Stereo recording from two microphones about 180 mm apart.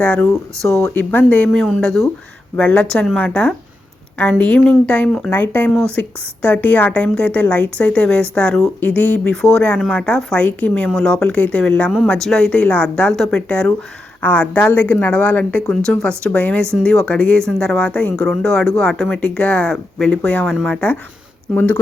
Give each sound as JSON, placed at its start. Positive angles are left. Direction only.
{"t": 0.0, "sound": "a woman's voice", "side_deg": 10}